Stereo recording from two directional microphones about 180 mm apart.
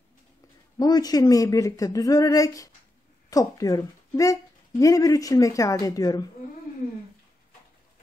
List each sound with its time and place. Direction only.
0.7 s speech: 20° left (ahead or behind)